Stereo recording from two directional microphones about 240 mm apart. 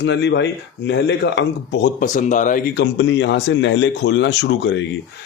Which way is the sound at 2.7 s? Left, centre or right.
Left.